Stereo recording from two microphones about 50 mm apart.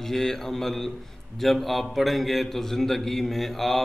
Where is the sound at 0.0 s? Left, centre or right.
Centre.